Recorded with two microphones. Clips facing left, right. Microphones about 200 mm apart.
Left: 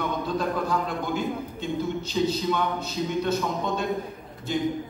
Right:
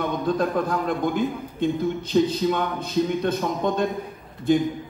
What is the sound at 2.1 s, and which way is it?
Speech, 50° right (ahead or behind).